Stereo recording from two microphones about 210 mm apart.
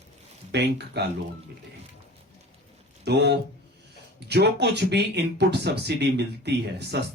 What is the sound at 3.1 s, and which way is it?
Speech, 50° right (ahead or behind).